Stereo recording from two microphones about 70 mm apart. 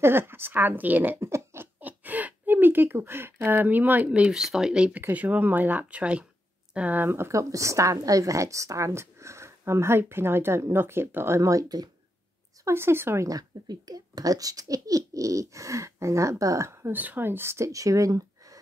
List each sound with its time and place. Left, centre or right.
0.0 s a woman's voice: right
1.2 s a sound: right; by 5.0 s centre
5.1 s a woman's voice: right
11.4 s speech: right
12.6 s a woman's voice: right
13.3 s speech: right
16.9 s a woman's voice: right
17.6 s speech: right